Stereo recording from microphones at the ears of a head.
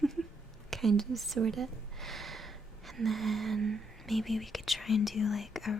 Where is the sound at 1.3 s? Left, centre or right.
Right.